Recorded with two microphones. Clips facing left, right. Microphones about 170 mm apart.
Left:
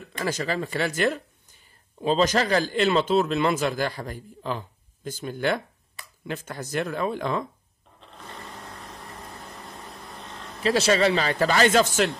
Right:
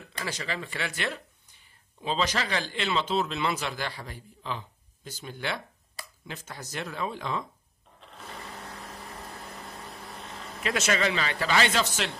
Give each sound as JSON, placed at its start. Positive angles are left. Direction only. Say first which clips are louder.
{"t": 0.2, "sound": "speech", "louder": "left 7 dB", "side_deg": 45}
{"t": 8.0, "sound": "light engine", "louder": "left 1 dB", "side_deg": 0}
{"t": 9.8, "sound": "vehicle", "louder": "left 1 dB", "side_deg": 0}
{"t": 10.6, "sound": "a man's voice", "louder": "left 7 dB", "side_deg": 30}